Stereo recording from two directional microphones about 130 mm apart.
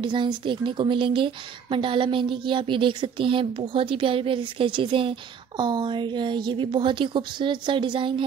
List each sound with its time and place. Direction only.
0.0 s a woman's voice: 35° right (ahead or behind)